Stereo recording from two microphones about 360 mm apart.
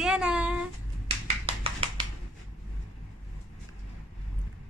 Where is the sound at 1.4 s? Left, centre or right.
Centre.